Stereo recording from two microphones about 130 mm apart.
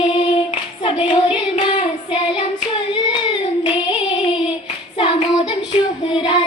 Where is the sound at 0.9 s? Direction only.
40° left (ahead or behind).